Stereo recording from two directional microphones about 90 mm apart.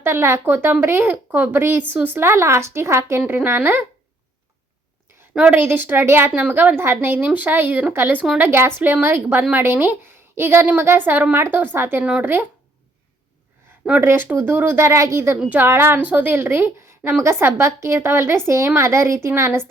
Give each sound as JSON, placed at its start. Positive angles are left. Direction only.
{"t": 0.0, "sound": "speech", "side_deg": -25}
{"t": 5.3, "sound": "a woman's voice", "side_deg": -10}
{"t": 5.5, "sound": "a woman's voice", "side_deg": -25}
{"t": 12.0, "sound": "speech", "side_deg": -15}
{"t": 14.0, "sound": "speech", "side_deg": -25}
{"t": 15.4, "sound": "speech", "side_deg": -20}